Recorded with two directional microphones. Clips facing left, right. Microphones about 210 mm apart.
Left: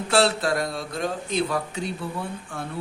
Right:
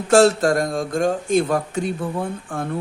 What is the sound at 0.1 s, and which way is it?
Speech, 45° right (ahead or behind).